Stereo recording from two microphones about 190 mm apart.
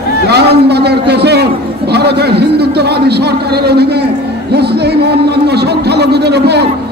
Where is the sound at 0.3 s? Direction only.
60° right (ahead or behind).